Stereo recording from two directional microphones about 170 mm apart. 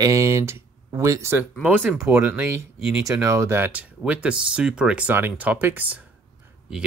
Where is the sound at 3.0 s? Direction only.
15° right (ahead or behind).